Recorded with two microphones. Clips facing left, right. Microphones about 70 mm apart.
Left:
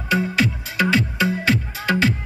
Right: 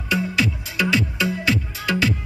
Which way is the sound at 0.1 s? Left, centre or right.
Left.